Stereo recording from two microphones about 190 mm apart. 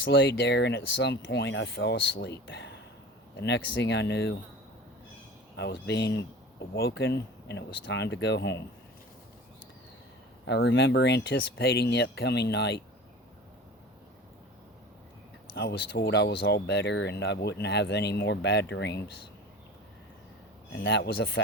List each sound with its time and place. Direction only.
0.1 s speech: 55° left (ahead or behind)
5.5 s speech: 65° left (ahead or behind)
10.4 s speech: 75° left (ahead or behind)
15.5 s speech: 60° left (ahead or behind)
20.8 s speech: 60° left (ahead or behind)